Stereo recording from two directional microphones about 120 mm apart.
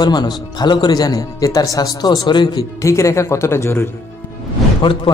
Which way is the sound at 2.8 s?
25° left (ahead or behind).